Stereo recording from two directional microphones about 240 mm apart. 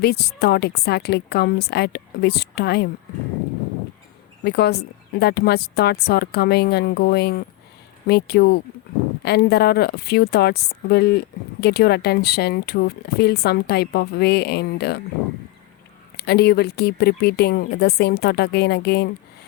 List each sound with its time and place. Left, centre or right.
0.0 s a woman's voice: left
4.4 s a woman's voice: left
16.1 s a woman's voice: left